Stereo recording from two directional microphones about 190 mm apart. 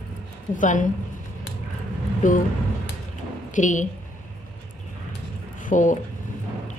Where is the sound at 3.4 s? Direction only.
40° left (ahead or behind).